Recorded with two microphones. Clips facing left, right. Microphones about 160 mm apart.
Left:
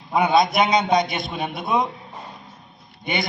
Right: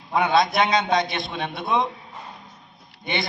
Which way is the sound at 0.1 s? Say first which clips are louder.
Left 2 dB; 20° left (ahead or behind).